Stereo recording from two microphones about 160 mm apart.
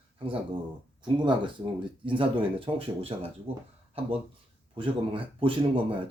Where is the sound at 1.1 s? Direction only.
30° right (ahead or behind).